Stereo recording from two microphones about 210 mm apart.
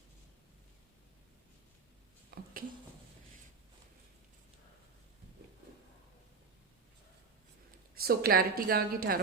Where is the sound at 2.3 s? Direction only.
40° right (ahead or behind).